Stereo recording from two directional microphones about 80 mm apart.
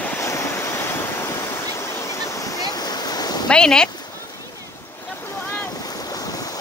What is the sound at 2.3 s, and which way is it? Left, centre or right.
Waves, left.